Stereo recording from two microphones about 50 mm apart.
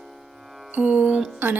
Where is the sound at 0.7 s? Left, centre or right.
Right.